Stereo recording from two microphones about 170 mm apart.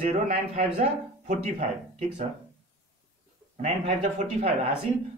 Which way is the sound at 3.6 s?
40° right (ahead or behind).